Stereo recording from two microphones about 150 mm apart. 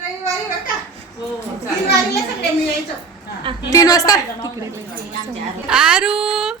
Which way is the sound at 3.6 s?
25° left (ahead or behind).